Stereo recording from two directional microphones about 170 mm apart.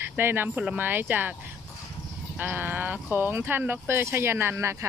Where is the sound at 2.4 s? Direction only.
10° right (ahead or behind).